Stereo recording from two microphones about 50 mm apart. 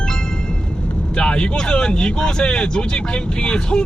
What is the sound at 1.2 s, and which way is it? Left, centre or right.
Speech, left.